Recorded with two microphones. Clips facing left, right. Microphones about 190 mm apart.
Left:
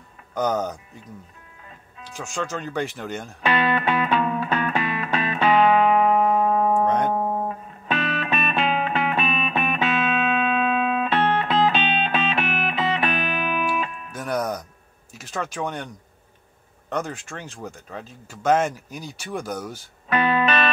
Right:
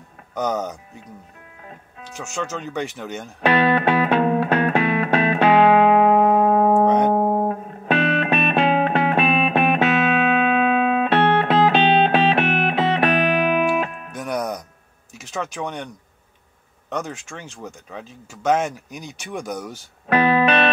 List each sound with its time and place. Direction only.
0.4 s speech: 5° right (ahead or behind)
2.2 s speech: 5° right (ahead or behind)
2.7 s speech: 5° left (ahead or behind)
3.4 s music: 60° right (ahead or behind)
14.1 s music: 5° left (ahead or behind)
15.4 s speech: 5° left (ahead or behind)
17.4 s speech: 10° left (ahead or behind)
20.1 s music: 60° right (ahead or behind)